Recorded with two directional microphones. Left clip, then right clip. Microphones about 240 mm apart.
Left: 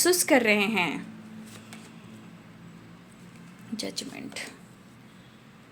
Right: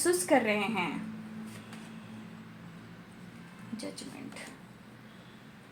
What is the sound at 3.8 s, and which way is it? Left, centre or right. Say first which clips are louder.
Speech: left 8 dB; left.